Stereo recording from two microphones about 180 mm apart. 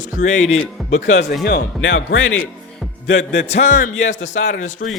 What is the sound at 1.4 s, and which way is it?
Speech, 65° left (ahead or behind).